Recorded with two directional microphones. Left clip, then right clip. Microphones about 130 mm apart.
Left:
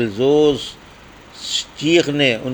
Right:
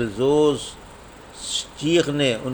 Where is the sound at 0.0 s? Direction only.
20° left (ahead or behind).